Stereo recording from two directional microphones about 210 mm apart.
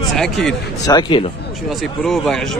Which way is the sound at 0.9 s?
20° left (ahead or behind).